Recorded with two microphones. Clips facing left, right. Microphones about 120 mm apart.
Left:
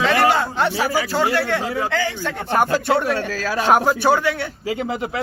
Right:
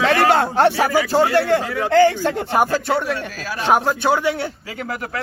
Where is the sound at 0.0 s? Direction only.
55° right (ahead or behind).